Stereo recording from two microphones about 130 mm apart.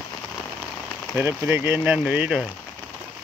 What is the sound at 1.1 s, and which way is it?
Speech, 15° right (ahead or behind).